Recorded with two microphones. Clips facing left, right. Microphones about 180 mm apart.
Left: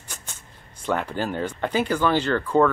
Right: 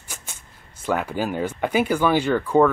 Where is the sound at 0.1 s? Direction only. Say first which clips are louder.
Right 1 dB; 10° right (ahead or behind).